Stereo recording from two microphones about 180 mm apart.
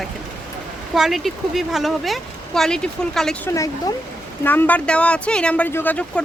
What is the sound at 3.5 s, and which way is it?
A woman's voice, 15° left (ahead or behind).